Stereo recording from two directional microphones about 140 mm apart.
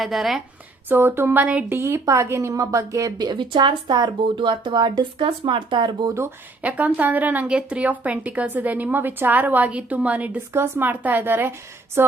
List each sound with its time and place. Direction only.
0.0 s a woman's voice: centre (ahead or behind)
0.9 s a woman's voice: 15° right (ahead or behind); by 6.1 s 30° right (ahead or behind)
6.1 s speech: 15° right (ahead or behind)